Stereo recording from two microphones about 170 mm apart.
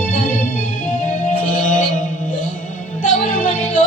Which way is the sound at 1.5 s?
50° left (ahead or behind).